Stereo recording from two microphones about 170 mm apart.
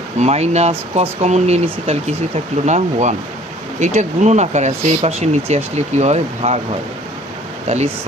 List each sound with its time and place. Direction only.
0.2 s speech: 40° right (ahead or behind)